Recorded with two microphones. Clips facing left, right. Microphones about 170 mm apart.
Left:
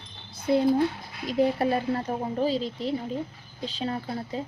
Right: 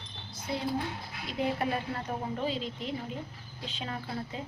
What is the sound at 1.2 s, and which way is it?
A woman's voice, 35° left (ahead or behind).